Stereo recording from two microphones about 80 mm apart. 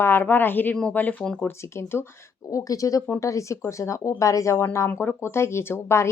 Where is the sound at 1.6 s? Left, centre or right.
Left.